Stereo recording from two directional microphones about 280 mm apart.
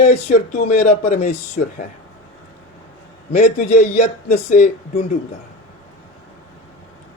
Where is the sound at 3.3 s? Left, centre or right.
Left.